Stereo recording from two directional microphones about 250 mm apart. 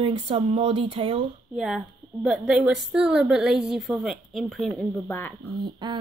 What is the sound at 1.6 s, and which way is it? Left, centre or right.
A woman's voice, centre.